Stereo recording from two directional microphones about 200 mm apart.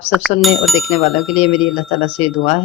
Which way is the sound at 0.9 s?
30° left (ahead or behind).